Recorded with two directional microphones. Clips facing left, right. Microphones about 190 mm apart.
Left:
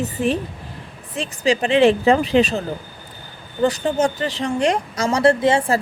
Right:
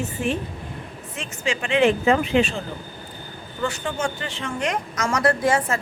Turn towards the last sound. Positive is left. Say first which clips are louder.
# left 5 dB
turn(degrees=25)  # may be behind; listen again after turning